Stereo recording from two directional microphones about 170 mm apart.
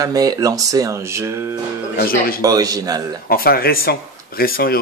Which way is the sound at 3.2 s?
60° left (ahead or behind).